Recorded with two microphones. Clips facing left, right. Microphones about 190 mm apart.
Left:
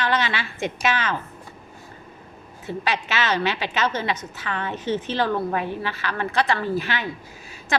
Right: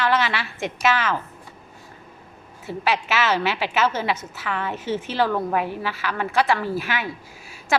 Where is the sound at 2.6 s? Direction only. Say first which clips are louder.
Right 2 dB; 5° right (ahead or behind).